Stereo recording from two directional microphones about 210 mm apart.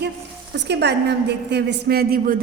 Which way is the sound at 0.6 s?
55° right (ahead or behind).